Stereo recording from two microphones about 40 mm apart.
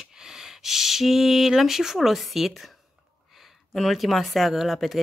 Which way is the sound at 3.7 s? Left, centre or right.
Centre.